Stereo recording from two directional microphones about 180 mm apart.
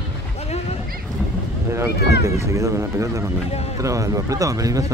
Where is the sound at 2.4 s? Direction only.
15° right (ahead or behind).